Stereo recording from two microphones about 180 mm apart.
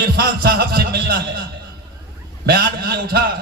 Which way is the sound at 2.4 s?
60° right (ahead or behind).